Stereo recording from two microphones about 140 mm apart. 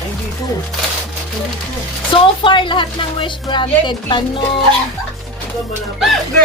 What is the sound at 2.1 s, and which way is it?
A woman's voice, 35° left (ahead or behind).